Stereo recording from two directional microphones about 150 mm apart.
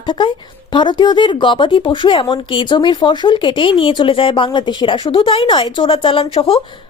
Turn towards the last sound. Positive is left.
turn(degrees=40)  # may be behind; listen again after turning